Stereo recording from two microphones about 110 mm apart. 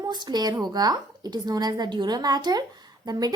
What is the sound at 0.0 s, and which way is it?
Speech, 40° right (ahead or behind).